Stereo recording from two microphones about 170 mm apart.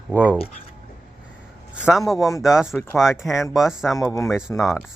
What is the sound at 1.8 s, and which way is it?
Speech, centre (ahead or behind).